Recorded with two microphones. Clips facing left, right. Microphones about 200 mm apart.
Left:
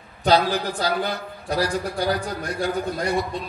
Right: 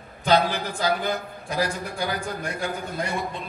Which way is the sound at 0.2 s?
35° left (ahead or behind).